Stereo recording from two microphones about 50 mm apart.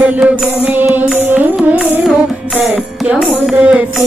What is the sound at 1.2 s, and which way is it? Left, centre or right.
Music, right.